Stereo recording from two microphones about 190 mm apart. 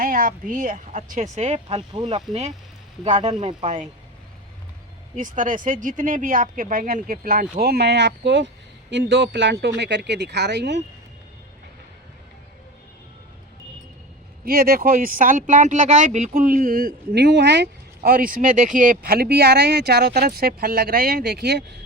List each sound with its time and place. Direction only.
0.0 s speech: 50° right (ahead or behind)
5.1 s speech: 45° right (ahead or behind); by 10.8 s 65° right (ahead or behind)
14.4 s speech: 50° right (ahead or behind)